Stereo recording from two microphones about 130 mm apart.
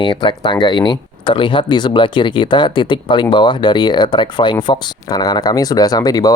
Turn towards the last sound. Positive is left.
turn(degrees=30)  # may be behind; listen again after turning